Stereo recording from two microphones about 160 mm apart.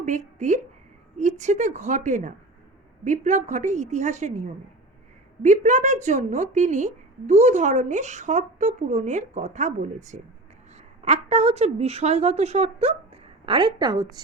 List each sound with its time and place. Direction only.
0.0 s a woman's voice: 50° right (ahead or behind); by 14.2 s 25° right (ahead or behind)